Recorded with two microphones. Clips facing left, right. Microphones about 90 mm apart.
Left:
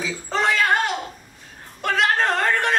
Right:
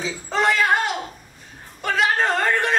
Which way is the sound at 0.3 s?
Centre (ahead or behind).